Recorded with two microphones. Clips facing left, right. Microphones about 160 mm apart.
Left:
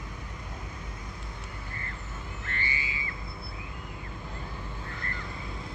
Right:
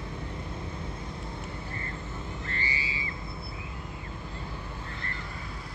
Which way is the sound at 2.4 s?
35° right (ahead or behind).